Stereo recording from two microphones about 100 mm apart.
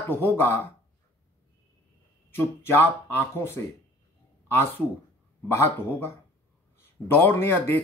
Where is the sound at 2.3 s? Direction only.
20° left (ahead or behind).